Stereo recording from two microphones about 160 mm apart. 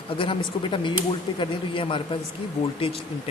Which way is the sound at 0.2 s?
30° left (ahead or behind).